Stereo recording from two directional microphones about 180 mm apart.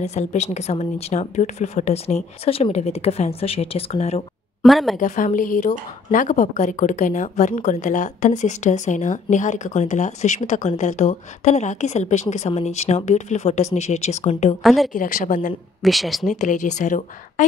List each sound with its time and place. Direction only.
0.0 s speech: 40° left (ahead or behind)
4.6 s speech: centre (ahead or behind)
4.9 s speech: 45° left (ahead or behind)
14.6 s speech: centre (ahead or behind)
14.9 s speech: 50° left (ahead or behind)
15.8 s speech: centre (ahead or behind)
16.3 s speech: 45° left (ahead or behind)